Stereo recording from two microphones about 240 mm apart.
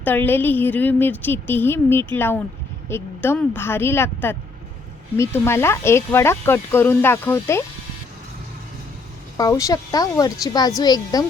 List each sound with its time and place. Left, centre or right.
0.0 s speech: centre
9.4 s speech: centre